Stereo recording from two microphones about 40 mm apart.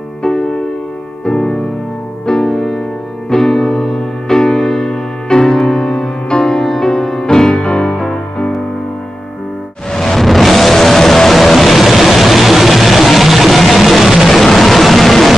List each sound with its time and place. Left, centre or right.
1.2 s music: centre
9.8 s music: centre
14.4 s vehicle: centre